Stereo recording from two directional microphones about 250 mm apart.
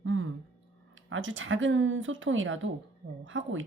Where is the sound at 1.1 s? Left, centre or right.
Right.